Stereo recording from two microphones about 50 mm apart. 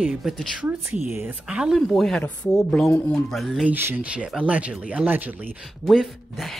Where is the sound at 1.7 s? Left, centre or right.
Centre.